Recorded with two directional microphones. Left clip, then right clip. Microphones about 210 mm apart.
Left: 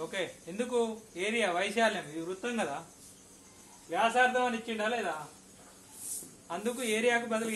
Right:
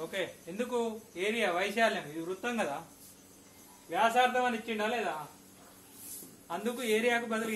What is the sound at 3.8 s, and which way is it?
Speech, 5° left (ahead or behind).